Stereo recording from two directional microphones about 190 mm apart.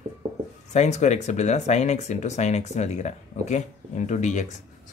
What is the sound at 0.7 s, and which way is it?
Speech, 40° left (ahead or behind).